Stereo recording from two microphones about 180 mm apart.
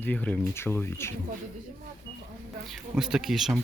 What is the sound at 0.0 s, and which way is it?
Speech, 10° left (ahead or behind).